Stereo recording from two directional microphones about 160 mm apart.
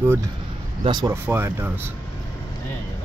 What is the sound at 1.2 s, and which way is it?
Speech, 10° right (ahead or behind).